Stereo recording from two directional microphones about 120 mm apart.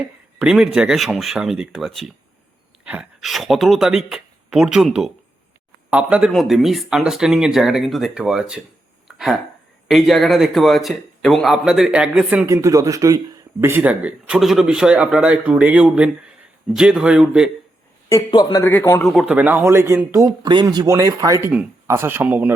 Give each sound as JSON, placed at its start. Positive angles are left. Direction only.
{"t": 0.3, "sound": "speech", "side_deg": -5}
{"t": 9.0, "sound": "a sound", "side_deg": -5}
{"t": 9.9, "sound": "speech", "side_deg": 0}
{"t": 12.5, "sound": "speech", "side_deg": -30}
{"t": 18.3, "sound": "speech", "side_deg": 35}
{"t": 18.6, "sound": "speech", "side_deg": 20}
{"t": 19.2, "sound": "speech", "side_deg": -10}
{"t": 20.1, "sound": "speech", "side_deg": -35}